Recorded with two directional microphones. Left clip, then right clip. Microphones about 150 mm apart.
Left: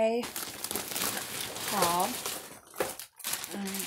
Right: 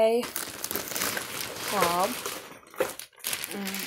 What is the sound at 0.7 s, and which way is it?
Crumpling, 30° right (ahead or behind).